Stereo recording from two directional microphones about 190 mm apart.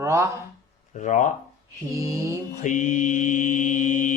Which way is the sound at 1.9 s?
15° right (ahead or behind).